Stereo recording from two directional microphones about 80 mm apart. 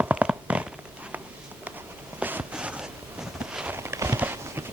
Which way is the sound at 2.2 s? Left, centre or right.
Right.